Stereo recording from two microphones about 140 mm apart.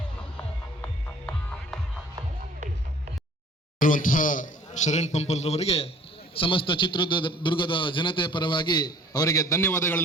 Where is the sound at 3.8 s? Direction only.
70° left (ahead or behind).